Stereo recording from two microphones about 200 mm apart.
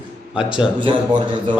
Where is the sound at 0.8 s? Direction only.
25° right (ahead or behind).